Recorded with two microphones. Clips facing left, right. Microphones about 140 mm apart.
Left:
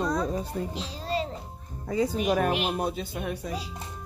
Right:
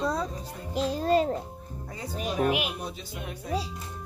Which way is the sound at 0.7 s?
50° right (ahead or behind).